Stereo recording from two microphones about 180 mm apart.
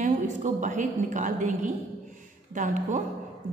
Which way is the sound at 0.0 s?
45° right (ahead or behind).